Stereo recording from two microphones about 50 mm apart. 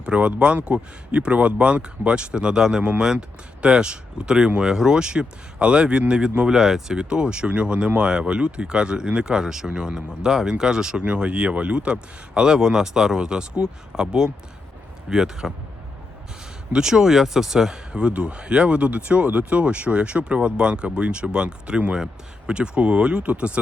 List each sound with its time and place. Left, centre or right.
0.0 s speech: right
16.7 s speech: centre